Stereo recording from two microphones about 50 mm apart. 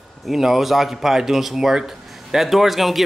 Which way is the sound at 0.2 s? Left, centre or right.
Centre.